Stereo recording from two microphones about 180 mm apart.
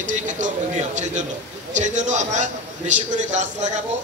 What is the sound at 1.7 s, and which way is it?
A man's voice, 40° right (ahead or behind).